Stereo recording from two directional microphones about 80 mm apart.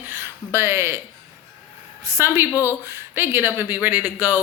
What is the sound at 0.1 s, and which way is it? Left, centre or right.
Speech, right.